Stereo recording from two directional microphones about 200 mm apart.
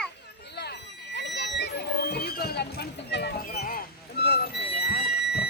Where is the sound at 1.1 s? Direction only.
60° left (ahead or behind).